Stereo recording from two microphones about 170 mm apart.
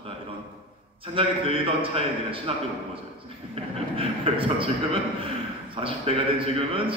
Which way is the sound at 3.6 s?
35° right (ahead or behind).